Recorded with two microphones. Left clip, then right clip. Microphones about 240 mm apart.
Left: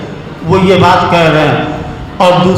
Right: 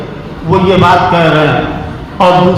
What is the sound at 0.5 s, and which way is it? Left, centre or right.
Speech, left.